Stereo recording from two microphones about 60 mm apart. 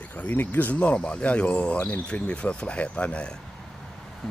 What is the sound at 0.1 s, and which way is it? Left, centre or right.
Speech, left.